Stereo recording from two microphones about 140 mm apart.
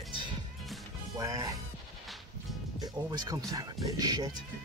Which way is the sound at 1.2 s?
25° right (ahead or behind).